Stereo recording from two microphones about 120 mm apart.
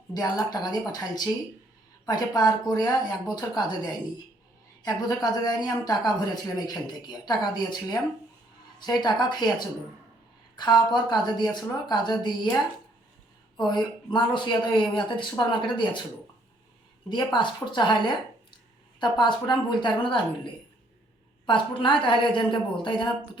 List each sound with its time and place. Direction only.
0.5 s speech: 35° left (ahead or behind)
4.9 s speech: 30° left (ahead or behind)
13.6 s speech: 40° left (ahead or behind)
17.1 s a woman's voice: 40° left (ahead or behind)